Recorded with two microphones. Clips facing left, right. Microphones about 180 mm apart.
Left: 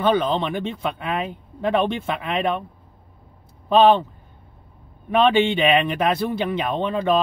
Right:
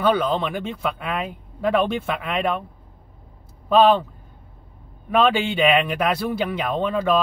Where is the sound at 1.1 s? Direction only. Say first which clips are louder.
Left 1 dB; 30° left (ahead or behind).